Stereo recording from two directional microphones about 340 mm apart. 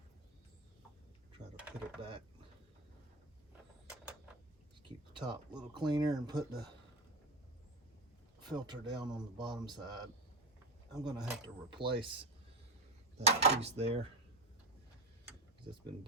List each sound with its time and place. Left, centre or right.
1.5 s a sound: centre
5.5 s speech: centre
8.4 s speech: centre